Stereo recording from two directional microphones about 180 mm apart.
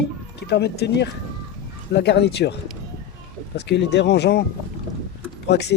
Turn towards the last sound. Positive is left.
turn(degrees=70)  # may be behind; listen again after turning